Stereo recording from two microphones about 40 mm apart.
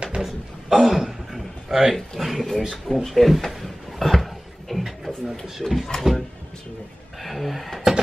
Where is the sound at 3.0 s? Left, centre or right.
Centre.